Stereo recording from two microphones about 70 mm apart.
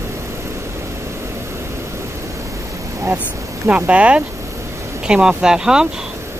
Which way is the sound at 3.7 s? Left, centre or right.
Centre.